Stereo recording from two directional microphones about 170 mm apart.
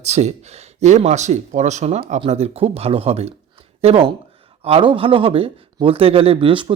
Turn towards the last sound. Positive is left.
turn(degrees=-30)  # may be behind; listen again after turning